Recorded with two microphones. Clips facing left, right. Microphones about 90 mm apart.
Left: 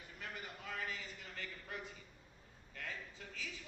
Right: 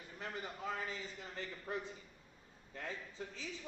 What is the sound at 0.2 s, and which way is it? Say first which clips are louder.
A man's voice: right 5 dB; 30° right (ahead or behind).